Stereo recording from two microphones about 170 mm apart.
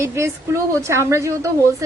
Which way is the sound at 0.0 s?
15° right (ahead or behind).